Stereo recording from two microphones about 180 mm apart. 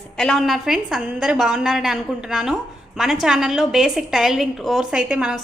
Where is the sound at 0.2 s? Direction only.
Centre (ahead or behind).